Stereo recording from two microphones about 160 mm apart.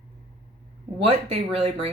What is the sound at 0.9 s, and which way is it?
Speech, 35° right (ahead or behind).